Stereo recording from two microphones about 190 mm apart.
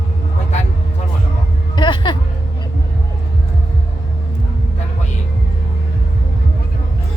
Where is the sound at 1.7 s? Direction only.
25° left (ahead or behind).